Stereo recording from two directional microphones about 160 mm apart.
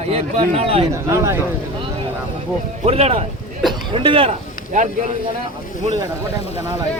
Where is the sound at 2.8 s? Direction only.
40° right (ahead or behind).